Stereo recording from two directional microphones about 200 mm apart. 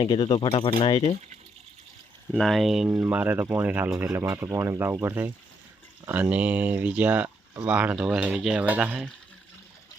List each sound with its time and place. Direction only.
0.0 s speech: 20° left (ahead or behind)
2.3 s speech: centre (ahead or behind)